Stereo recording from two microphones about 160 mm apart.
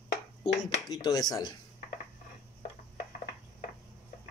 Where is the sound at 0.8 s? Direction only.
25° left (ahead or behind).